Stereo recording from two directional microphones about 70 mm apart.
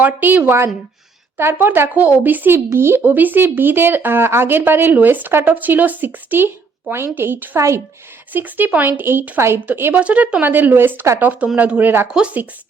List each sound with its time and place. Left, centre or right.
0.0 s speech: right
10.0 s speech: centre
12.1 s speech: centre